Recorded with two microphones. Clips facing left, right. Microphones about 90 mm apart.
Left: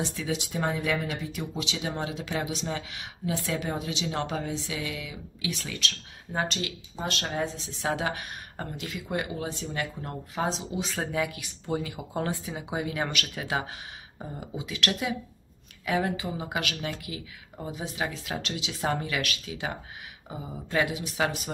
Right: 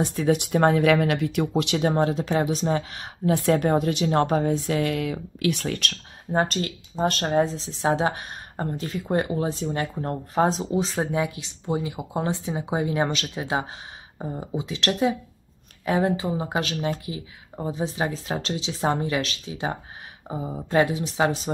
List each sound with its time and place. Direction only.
0.0 s speech: 45° right (ahead or behind)
11.0 s speech: 25° right (ahead or behind)